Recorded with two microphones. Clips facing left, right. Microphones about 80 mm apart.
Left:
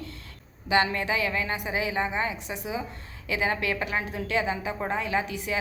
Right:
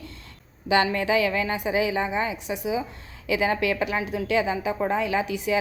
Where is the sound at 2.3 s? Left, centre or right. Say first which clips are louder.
Right 5 dB; centre.